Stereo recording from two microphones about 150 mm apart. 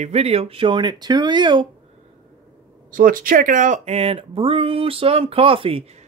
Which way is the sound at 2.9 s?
70° right (ahead or behind).